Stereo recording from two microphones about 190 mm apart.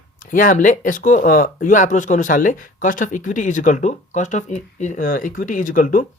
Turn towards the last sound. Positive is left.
turn(degrees=45)  # may be behind; listen again after turning